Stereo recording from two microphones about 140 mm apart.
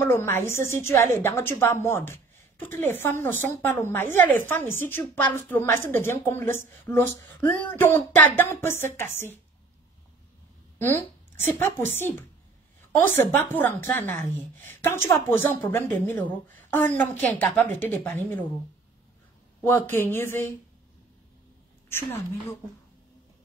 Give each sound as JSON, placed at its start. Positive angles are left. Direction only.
{"t": 0.0, "sound": "a woman's voice", "side_deg": 15}
{"t": 11.5, "sound": "a woman's voice", "side_deg": 15}
{"t": 19.6, "sound": "a woman's voice", "side_deg": 15}